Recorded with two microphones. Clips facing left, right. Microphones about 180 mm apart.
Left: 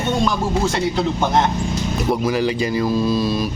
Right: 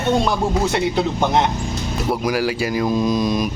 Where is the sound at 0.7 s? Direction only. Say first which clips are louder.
Right 1 dB; 15° right (ahead or behind).